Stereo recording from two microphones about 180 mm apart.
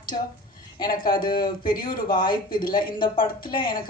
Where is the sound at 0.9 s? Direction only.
50° left (ahead or behind).